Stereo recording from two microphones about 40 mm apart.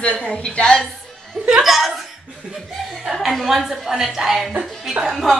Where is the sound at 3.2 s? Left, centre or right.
Centre.